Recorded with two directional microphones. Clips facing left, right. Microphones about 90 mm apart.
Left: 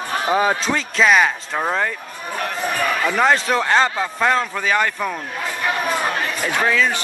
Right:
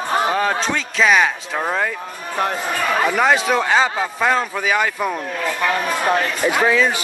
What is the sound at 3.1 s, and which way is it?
Speech, 5° right (ahead or behind).